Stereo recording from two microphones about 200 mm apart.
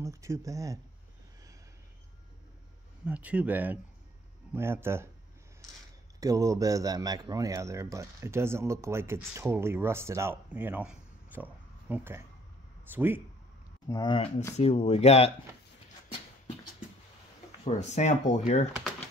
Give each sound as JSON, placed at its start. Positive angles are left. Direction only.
{"t": 0.0, "sound": "speech", "side_deg": -15}
{"t": 3.1, "sound": "speech", "side_deg": -5}
{"t": 6.1, "sound": "speech", "side_deg": -15}
{"t": 13.8, "sound": "speech", "side_deg": 20}
{"t": 17.6, "sound": "speech", "side_deg": 35}